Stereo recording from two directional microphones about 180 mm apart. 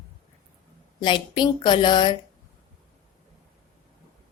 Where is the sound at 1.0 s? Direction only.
25° left (ahead or behind).